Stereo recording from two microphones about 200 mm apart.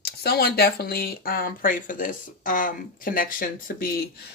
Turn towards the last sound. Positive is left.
turn(degrees=45)  # may be behind; listen again after turning